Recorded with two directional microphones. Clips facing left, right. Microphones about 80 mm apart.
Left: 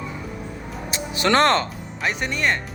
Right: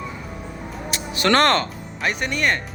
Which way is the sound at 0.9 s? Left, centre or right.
Left.